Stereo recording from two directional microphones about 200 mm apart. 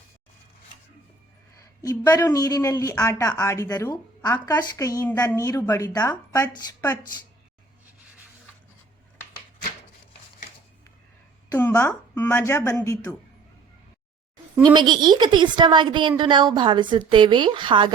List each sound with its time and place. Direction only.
1.5 s speech: 20° left (ahead or behind)
11.5 s speech: 15° left (ahead or behind)
14.6 s a woman's voice: 20° right (ahead or behind)